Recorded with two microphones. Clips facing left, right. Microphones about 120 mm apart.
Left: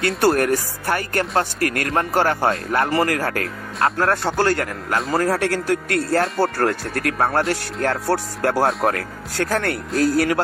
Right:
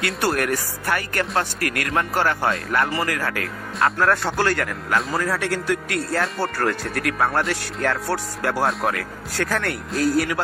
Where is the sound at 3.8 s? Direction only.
30° left (ahead or behind).